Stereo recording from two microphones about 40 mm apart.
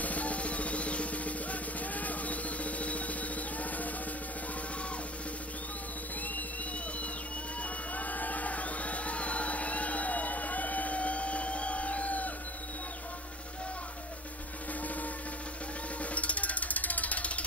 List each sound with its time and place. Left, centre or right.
0.0 s music: left
7.9 s music: left
16.0 s music: left